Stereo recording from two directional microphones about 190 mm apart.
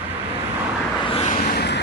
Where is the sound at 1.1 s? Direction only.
35° left (ahead or behind).